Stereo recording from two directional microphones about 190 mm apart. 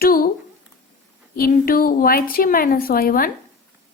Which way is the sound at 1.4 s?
50° left (ahead or behind).